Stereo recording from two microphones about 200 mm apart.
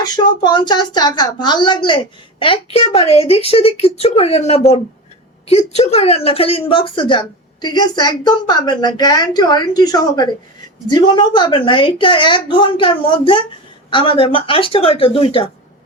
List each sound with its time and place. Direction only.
0.0 s speech: 20° left (ahead or behind)